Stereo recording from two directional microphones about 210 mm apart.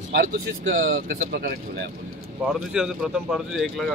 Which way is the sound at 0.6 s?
50° right (ahead or behind).